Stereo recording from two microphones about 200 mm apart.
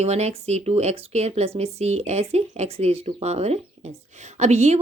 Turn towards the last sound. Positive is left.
turn(degrees=-35)  # may be behind; listen again after turning